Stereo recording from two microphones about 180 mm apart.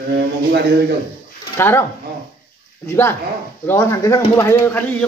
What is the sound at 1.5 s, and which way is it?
Speech, 10° left (ahead or behind).